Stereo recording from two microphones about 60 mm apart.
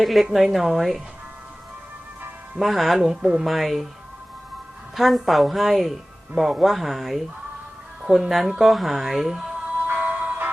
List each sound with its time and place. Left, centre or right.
0.0 s speech: centre
2.6 s speech: centre
4.9 s speech: centre
8.0 s speech: centre
8.5 s speech: centre
9.8 s music: right